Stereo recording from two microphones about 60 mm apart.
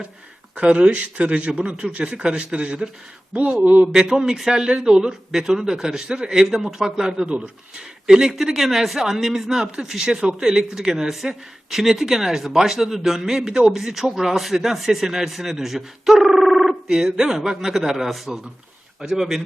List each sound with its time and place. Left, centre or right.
0.5 s speech: centre
3.9 s speech: centre